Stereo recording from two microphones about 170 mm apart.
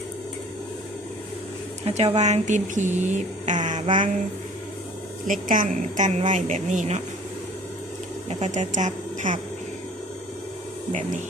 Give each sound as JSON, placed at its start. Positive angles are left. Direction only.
{"t": 1.8, "sound": "speech", "side_deg": -40}
{"t": 5.3, "sound": "speech", "side_deg": -50}
{"t": 8.3, "sound": "speech", "side_deg": -45}